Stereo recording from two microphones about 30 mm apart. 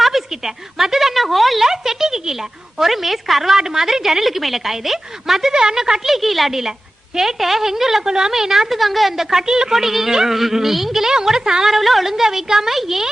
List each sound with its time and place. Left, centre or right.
0.0 s a sound: centre
1.6 s a sound: centre
2.7 s a woman's voice: centre
6.2 s a woman's voice: centre
6.5 s a woman's voice: centre
8.0 s a woman's voice: right
8.3 s a woman's voice: centre
9.5 s a woman's voice: right
9.7 s a woman's voice: centre
11.3 s a woman's voice: right
11.6 s a woman's voice: centre